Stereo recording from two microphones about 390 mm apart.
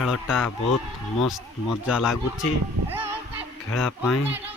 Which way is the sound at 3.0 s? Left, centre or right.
Right.